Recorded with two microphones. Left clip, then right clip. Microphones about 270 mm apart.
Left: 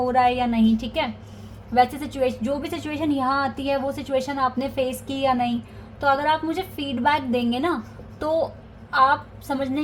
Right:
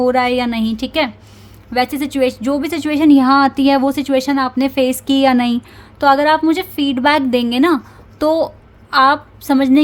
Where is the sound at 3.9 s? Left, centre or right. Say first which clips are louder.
Right 9 dB; right.